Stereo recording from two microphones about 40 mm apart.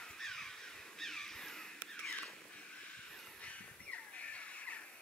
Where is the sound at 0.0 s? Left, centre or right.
Centre.